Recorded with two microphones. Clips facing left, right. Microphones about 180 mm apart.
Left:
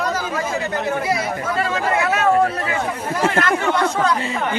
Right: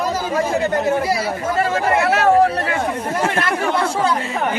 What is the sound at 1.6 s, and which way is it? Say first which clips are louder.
Speech: right 3 dB; 45° right (ahead or behind).